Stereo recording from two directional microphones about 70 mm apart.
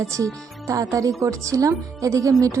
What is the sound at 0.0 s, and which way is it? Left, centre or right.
Speech, right.